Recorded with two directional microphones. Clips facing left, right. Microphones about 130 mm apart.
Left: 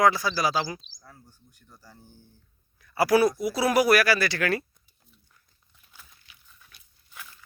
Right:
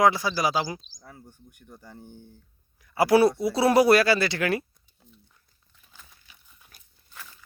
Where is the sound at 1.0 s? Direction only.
60° right (ahead or behind).